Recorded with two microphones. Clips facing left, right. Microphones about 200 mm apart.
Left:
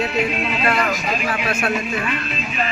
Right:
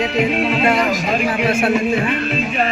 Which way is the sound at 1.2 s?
30° right (ahead or behind).